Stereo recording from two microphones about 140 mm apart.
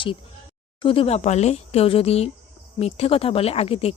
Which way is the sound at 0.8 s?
40° left (ahead or behind).